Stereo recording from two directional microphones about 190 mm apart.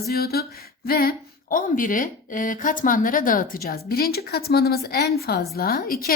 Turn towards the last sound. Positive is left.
turn(degrees=50)  # may be behind; listen again after turning